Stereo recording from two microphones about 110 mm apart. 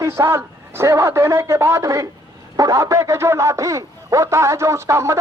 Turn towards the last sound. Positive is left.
turn(degrees=-25)  # may be behind; listen again after turning